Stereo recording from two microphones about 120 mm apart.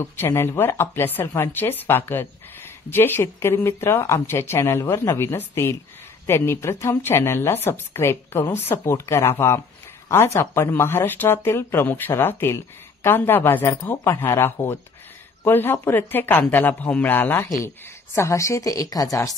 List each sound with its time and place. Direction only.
0.0 s speech: 20° left (ahead or behind)